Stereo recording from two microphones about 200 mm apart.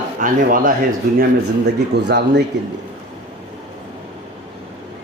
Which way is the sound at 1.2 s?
55° right (ahead or behind).